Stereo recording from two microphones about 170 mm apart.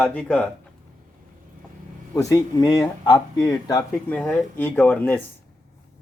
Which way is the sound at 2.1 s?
20° left (ahead or behind).